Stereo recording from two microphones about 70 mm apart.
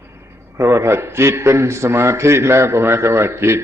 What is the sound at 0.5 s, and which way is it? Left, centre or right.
A man's voice, right.